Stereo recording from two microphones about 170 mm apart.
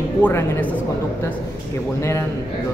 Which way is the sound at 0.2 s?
10° left (ahead or behind).